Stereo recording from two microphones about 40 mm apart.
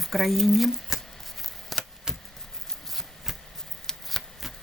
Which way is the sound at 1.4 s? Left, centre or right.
Centre.